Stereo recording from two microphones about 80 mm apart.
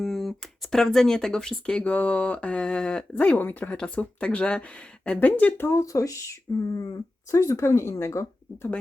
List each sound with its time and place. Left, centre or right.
0.0 s speech: centre; by 8.7 s left